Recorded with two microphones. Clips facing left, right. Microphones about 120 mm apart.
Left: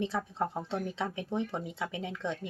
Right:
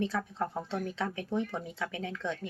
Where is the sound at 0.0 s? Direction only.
25° left (ahead or behind).